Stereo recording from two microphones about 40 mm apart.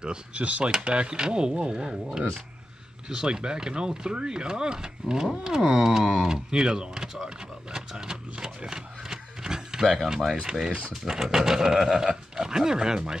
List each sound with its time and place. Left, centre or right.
0.0 s speech: right
0.4 s speech: right
0.8 s speech: right
3.1 s speech: right
8.6 s a sound: centre
9.9 s speech: centre